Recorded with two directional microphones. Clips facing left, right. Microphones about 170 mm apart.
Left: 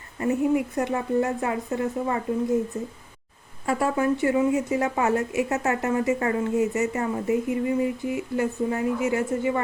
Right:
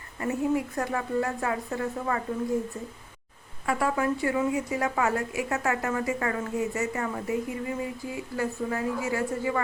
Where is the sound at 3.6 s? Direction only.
25° left (ahead or behind).